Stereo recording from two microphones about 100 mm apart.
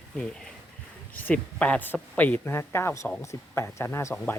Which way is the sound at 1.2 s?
15° left (ahead or behind).